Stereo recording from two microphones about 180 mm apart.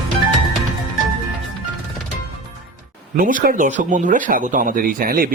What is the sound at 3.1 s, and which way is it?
Speech, 50° right (ahead or behind).